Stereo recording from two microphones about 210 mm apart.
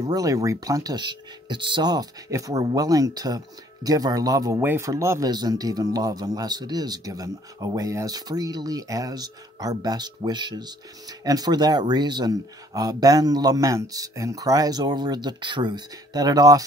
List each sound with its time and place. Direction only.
0.0 s speech: 15° right (ahead or behind)